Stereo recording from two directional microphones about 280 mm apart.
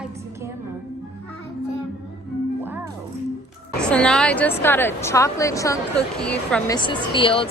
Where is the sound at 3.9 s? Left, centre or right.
Centre.